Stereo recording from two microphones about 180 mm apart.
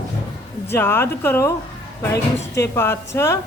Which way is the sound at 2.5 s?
15° left (ahead or behind).